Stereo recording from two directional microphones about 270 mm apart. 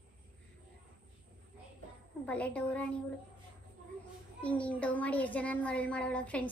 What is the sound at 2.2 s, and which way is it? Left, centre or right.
Child singing, centre.